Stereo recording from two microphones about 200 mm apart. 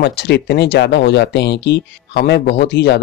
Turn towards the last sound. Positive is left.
turn(degrees=55)  # may be behind; listen again after turning